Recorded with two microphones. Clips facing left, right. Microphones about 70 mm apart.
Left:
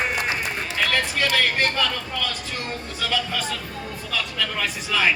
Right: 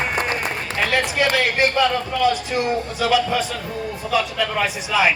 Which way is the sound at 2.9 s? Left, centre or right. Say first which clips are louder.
Right 6 dB; centre.